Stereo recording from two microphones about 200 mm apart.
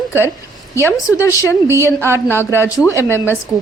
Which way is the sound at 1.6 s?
15° right (ahead or behind).